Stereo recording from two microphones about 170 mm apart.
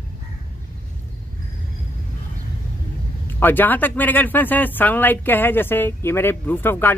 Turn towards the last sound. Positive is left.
turn(degrees=10)  # may be behind; listen again after turning